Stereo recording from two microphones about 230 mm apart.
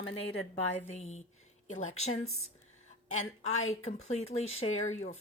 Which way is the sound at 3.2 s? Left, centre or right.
Left.